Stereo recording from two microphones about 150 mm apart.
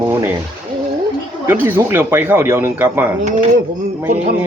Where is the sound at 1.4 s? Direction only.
15° right (ahead or behind).